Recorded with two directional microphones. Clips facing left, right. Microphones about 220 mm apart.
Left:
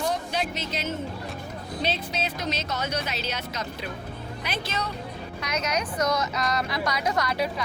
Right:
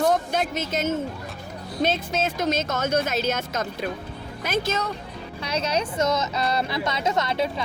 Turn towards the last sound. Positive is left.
turn(degrees=-25)  # may be behind; listen again after turning